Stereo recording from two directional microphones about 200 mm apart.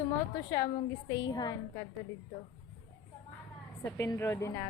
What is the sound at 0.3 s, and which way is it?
A woman's voice, 15° left (ahead or behind).